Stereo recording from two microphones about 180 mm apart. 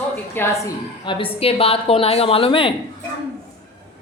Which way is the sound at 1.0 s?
30° left (ahead or behind).